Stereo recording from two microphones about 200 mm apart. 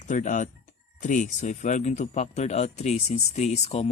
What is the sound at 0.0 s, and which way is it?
Speech, 40° left (ahead or behind).